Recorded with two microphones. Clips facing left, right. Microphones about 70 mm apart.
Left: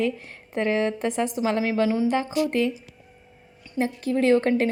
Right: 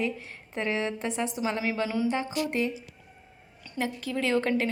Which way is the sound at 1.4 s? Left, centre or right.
Left.